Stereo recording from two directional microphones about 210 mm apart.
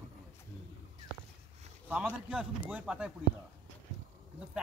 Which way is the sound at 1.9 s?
5° right (ahead or behind).